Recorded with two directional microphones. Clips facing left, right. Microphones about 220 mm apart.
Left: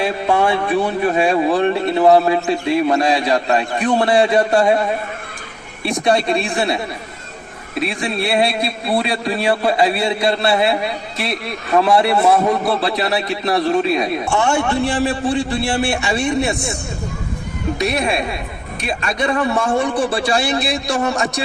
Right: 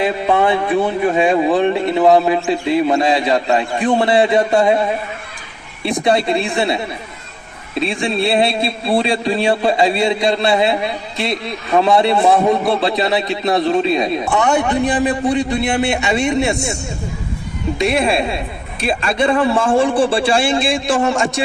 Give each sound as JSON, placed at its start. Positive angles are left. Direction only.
{"t": 0.0, "sound": "a man's voice", "side_deg": -20}
{"t": 5.8, "sound": "a man's voice", "side_deg": -20}
{"t": 17.7, "sound": "a man's voice", "side_deg": -25}